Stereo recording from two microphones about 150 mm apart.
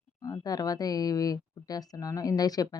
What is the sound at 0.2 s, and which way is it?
Speech, 25° left (ahead or behind).